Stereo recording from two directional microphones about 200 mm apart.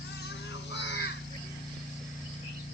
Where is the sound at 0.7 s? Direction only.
65° left (ahead or behind).